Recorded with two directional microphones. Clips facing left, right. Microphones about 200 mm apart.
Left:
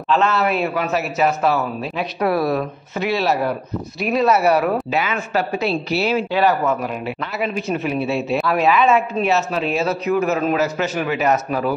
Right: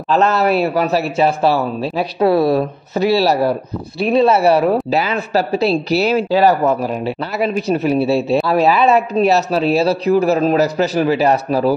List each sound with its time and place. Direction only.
0.1 s speech: 40° right (ahead or behind)